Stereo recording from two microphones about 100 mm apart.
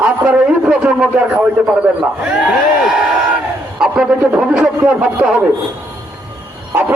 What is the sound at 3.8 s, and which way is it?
A man's voice, 5° right (ahead or behind).